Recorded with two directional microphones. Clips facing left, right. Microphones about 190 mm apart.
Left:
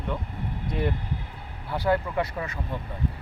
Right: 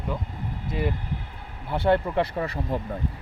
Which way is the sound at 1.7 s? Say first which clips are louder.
Right 3 dB; 25° right (ahead or behind).